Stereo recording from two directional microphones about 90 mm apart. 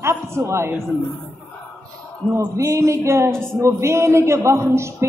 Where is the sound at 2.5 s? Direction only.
35° right (ahead or behind).